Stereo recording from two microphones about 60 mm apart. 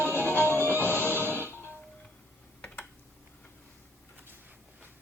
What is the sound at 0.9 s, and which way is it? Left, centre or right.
Music, left.